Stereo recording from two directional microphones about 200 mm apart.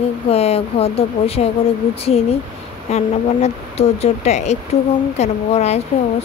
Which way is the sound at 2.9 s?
35° left (ahead or behind).